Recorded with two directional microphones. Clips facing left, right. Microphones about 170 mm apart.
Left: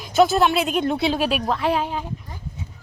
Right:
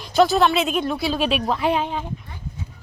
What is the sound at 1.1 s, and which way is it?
Speech, 5° left (ahead or behind).